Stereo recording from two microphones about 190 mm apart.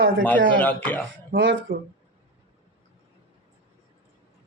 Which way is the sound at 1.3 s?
75° right (ahead or behind).